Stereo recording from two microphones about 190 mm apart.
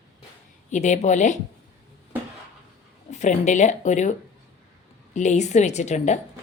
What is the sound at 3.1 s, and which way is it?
Speech, 40° left (ahead or behind).